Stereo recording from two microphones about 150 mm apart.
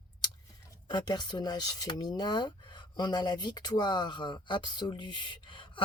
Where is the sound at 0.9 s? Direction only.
30° left (ahead or behind).